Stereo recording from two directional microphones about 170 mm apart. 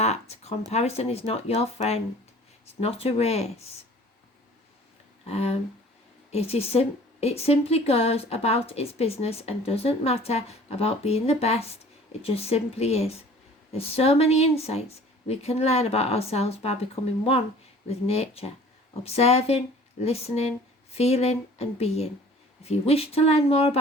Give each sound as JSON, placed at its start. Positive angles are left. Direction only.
{"t": 0.0, "sound": "a sound", "side_deg": 40}
{"t": 0.7, "sound": "a woman's voice", "side_deg": 40}
{"t": 5.3, "sound": "a woman's voice", "side_deg": 40}